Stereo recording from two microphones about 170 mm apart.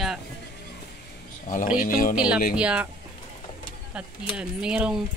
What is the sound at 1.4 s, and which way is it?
Speech, 50° left (ahead or behind).